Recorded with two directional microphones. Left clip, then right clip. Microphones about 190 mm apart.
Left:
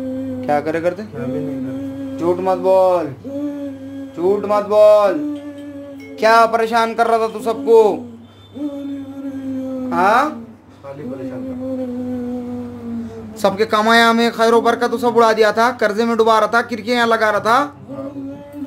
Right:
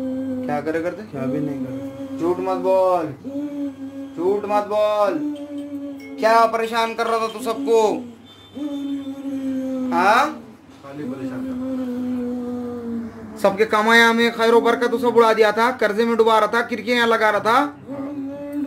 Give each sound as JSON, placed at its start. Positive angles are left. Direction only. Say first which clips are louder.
{"t": 0.5, "sound": "mantra", "louder": "left 7 dB", "side_deg": 50}
{"t": 2.4, "sound": "speech", "louder": "left 5 dB", "side_deg": 60}
{"t": 4.5, "sound": "speech", "louder": "left 11 dB", "side_deg": 55}
{"t": 6.2, "sound": "speech", "louder": "left 4 dB", "side_deg": 55}
{"t": 9.8, "sound": "speech", "louder": "left 2 dB", "side_deg": 55}
{"t": 13.4, "sound": "speech", "louder": "left 2 dB", "side_deg": 5}